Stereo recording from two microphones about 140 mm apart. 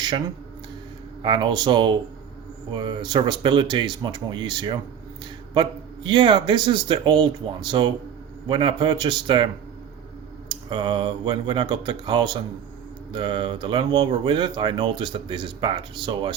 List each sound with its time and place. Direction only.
1.2 s speech: 35° right (ahead or behind)
10.5 s speech: 35° right (ahead or behind)